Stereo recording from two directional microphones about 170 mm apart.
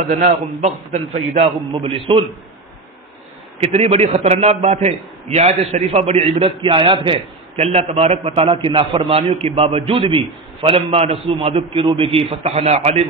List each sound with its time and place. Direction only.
0.1 s a man's voice: 50° right (ahead or behind)
1.7 s a man's voice: 30° right (ahead or behind)
3.5 s a man's voice: 35° right (ahead or behind)